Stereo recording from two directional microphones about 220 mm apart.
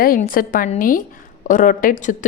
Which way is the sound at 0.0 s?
40° left (ahead or behind).